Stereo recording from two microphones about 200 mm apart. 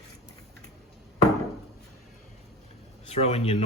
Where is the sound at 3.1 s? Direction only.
30° left (ahead or behind).